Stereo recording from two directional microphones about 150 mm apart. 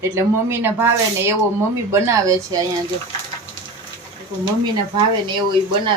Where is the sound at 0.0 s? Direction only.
20° right (ahead or behind).